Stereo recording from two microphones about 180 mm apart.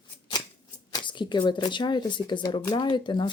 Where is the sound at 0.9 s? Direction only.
25° left (ahead or behind).